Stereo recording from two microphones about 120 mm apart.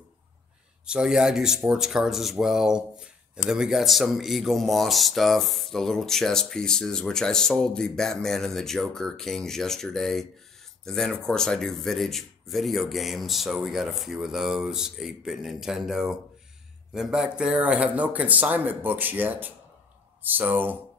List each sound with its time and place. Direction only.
0.8 s speech: 5° right (ahead or behind)